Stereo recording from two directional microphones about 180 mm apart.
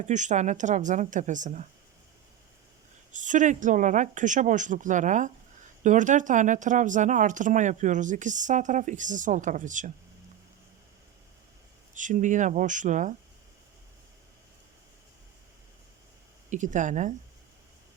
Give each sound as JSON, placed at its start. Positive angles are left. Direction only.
{"t": 0.0, "sound": "speech", "side_deg": -40}
{"t": 3.1, "sound": "speech", "side_deg": -45}
{"t": 11.9, "sound": "speech", "side_deg": -45}
{"t": 16.5, "sound": "speech", "side_deg": -45}